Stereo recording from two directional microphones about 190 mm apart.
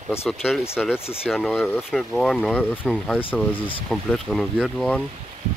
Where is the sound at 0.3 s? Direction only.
Centre (ahead or behind).